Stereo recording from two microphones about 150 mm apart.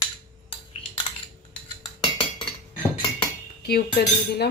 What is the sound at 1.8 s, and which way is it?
Chink, 35° left (ahead or behind).